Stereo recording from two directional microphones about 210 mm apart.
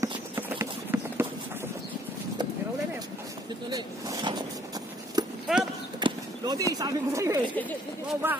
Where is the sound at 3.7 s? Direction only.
20° right (ahead or behind).